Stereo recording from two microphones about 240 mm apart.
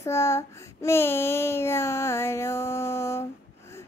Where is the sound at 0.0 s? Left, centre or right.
Centre.